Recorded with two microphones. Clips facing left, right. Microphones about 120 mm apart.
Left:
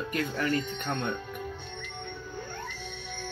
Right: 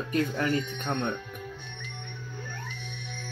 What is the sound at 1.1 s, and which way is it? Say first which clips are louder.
Music: left 2 dB; 30° left (ahead or behind).